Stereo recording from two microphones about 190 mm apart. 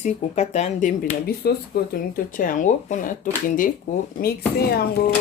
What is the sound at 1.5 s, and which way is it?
Speech, 55° left (ahead or behind).